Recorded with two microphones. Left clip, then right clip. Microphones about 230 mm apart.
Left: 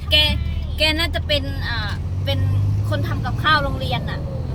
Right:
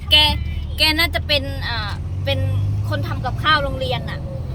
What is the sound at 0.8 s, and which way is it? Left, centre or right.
Speech, right.